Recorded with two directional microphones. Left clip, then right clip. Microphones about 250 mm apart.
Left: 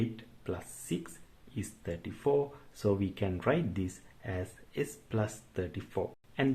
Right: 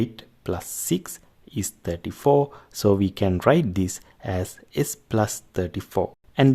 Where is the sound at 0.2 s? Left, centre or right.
Right.